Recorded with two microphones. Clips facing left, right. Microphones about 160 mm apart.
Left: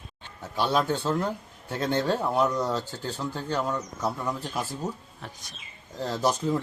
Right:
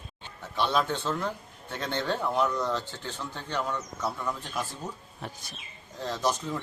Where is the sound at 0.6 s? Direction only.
35° left (ahead or behind).